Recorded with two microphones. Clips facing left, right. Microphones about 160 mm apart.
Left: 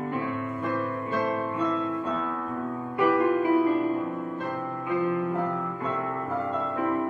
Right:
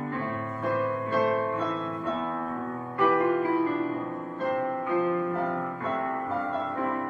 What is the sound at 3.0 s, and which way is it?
Music, 15° left (ahead or behind).